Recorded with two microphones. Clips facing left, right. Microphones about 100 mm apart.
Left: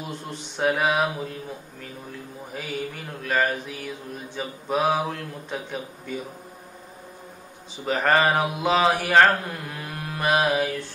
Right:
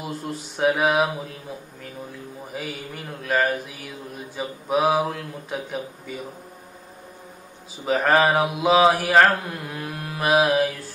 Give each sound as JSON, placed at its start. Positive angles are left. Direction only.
{"t": 0.1, "sound": "speech", "side_deg": -5}
{"t": 2.5, "sound": "speech", "side_deg": 0}
{"t": 7.8, "sound": "speech", "side_deg": 0}